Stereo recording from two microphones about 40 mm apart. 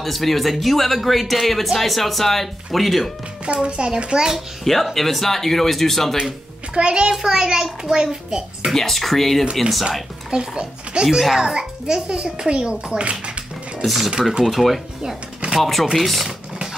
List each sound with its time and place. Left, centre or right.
0.0 s speech: centre
3.4 s a child's voice: right
4.9 s speech: centre
6.7 s a child's voice: right
8.7 s speech: centre
9.4 s a child's voice: centre
11.1 s a child's voice: centre
11.5 s a child's voice: right
13.8 s speech: centre